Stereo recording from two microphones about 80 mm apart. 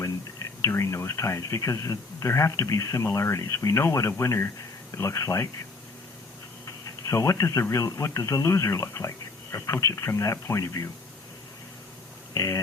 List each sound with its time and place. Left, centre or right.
0.6 s speech: left
6.7 s a sound: left
7.6 s speech: left
12.3 s speech: left